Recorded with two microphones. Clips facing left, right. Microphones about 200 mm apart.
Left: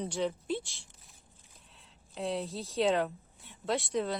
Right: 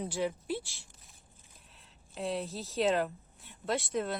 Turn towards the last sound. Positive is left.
turn(degrees=0)  # may be behind; listen again after turning